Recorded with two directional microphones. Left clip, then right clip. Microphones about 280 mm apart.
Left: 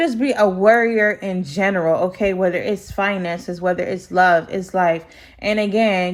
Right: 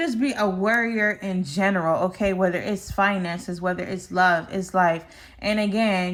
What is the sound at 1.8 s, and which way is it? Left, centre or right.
Speech, centre.